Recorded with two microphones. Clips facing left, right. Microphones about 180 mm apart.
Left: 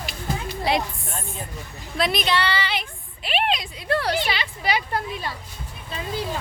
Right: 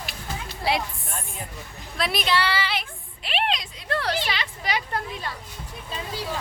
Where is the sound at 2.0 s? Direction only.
5° right (ahead or behind).